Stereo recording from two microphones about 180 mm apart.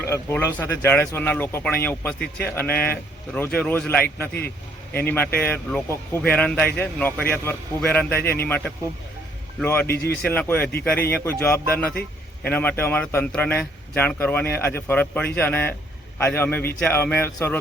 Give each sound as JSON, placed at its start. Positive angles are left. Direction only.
{"t": 0.0, "sound": "speech", "side_deg": 15}
{"t": 5.0, "sound": "speech", "side_deg": 10}
{"t": 9.8, "sound": "speech", "side_deg": 60}
{"t": 10.2, "sound": "speech", "side_deg": 10}